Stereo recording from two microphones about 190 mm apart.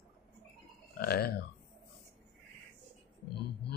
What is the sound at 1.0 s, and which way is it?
Speech, 55° left (ahead or behind).